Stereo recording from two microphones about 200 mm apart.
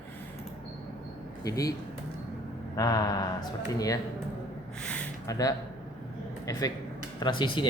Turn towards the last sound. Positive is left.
turn(degrees=25)  # may be behind; listen again after turning